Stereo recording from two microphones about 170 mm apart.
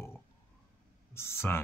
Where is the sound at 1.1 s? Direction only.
15° left (ahead or behind).